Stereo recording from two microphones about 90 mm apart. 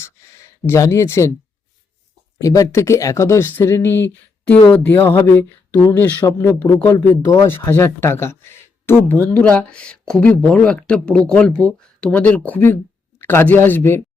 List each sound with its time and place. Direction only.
0.0 s a sound: 30° left (ahead or behind)
2.4 s speech: 40° left (ahead or behind); by 9.2 s 25° left (ahead or behind)
9.3 s speech: 15° left (ahead or behind)